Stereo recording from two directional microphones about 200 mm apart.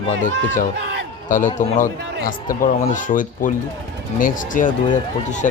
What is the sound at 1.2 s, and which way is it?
A man's voice, 40° left (ahead or behind).